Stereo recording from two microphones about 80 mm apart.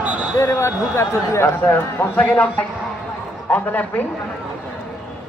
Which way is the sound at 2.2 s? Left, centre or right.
Centre.